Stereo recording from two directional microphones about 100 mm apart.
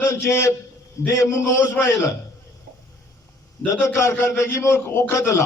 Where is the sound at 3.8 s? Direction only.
30° left (ahead or behind).